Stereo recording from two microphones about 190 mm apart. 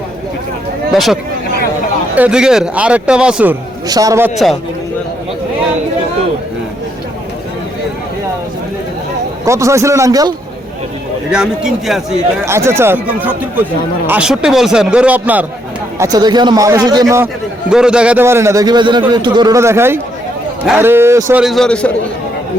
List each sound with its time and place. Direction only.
0.9 s speech: centre (ahead or behind)
3.8 s a man's voice: 20° right (ahead or behind)
9.4 s a man's voice: 15° right (ahead or behind)
11.3 s speech: 5° right (ahead or behind)
12.5 s a man's voice: 15° right (ahead or behind)
16.0 s a man's voice: 20° right (ahead or behind)
17.7 s a man's voice: 5° right (ahead or behind)
21.4 s speech: centre (ahead or behind)